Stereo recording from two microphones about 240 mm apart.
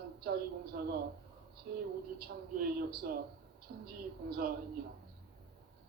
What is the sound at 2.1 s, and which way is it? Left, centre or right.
Speech, right.